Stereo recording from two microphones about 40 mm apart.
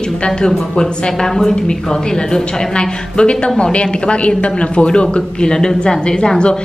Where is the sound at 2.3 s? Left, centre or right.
Left.